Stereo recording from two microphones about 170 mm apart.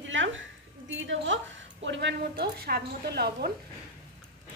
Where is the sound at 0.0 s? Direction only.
90° right.